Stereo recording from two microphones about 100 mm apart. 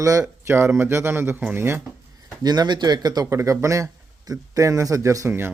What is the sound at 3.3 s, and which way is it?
Speech, 30° right (ahead or behind).